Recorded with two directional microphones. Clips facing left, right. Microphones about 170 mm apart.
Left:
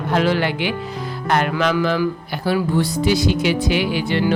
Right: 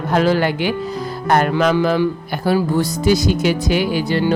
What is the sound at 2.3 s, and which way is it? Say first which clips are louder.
Speech: right 2 dB; 50° right (ahead or behind).